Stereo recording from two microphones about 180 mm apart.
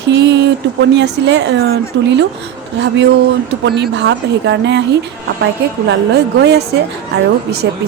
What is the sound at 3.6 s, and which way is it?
A woman's voice, 75° right (ahead or behind).